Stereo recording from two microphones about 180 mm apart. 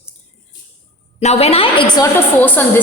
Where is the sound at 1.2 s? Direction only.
35° left (ahead or behind).